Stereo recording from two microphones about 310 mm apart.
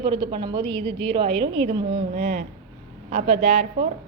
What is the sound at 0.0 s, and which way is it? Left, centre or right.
A woman's voice, centre.